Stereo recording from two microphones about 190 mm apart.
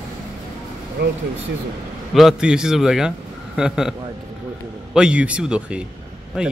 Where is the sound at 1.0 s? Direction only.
60° right (ahead or behind).